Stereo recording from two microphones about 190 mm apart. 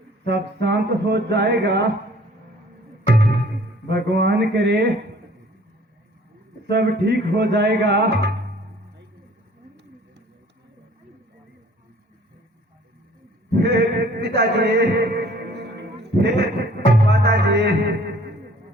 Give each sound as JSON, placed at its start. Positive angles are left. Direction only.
{"t": 0.3, "sound": "music", "side_deg": -60}
{"t": 3.8, "sound": "music", "side_deg": -60}
{"t": 6.7, "sound": "music", "side_deg": -60}
{"t": 13.6, "sound": "a sound", "side_deg": -60}